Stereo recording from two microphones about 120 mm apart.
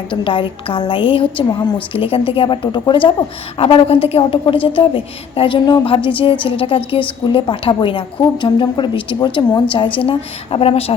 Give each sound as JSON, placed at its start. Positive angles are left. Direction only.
{"t": 0.1, "sound": "a woman's voice", "side_deg": 45}